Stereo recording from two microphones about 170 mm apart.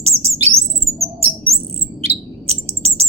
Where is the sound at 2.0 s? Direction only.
40° right (ahead or behind).